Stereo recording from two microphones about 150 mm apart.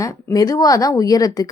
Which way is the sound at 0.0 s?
25° left (ahead or behind).